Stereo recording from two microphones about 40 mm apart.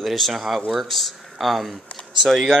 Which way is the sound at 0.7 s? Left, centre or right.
Centre.